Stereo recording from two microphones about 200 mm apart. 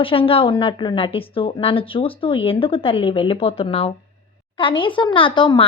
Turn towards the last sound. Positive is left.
turn(degrees=25)  # may be behind; listen again after turning